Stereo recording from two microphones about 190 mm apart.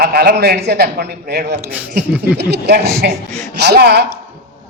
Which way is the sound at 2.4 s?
60° right (ahead or behind).